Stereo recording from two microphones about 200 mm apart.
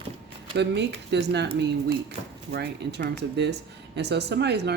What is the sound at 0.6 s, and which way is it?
Speech, 60° right (ahead or behind).